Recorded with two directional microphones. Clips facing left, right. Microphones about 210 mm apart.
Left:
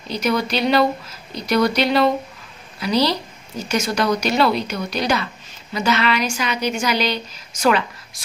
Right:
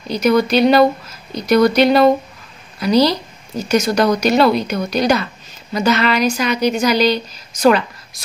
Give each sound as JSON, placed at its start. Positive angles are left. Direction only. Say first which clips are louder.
{"t": 0.1, "sound": "a woman's voice", "louder": "right 7 dB", "side_deg": -45}